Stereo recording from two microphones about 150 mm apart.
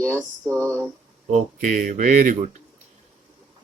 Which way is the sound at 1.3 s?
55° right (ahead or behind).